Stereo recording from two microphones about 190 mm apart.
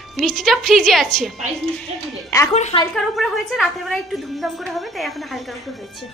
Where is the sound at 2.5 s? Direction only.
35° left (ahead or behind).